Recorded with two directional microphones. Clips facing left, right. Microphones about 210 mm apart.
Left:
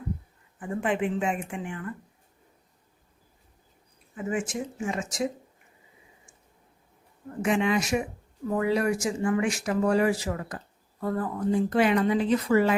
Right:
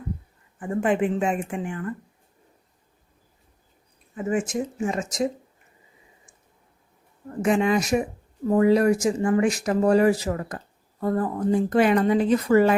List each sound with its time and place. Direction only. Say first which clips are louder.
0.6 s speech: right 5 dB; 45° right (ahead or behind)
4.3 s speech: right 5 dB; 40° right (ahead or behind)
7.4 s speech: right 4 dB; 40° right (ahead or behind)